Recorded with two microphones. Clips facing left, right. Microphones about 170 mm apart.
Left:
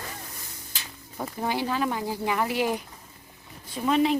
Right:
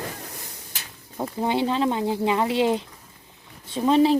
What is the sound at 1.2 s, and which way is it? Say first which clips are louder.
Speech: right 5 dB; 20° right (ahead or behind).